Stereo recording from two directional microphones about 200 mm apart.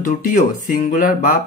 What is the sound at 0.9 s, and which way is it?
Speech, 40° left (ahead or behind).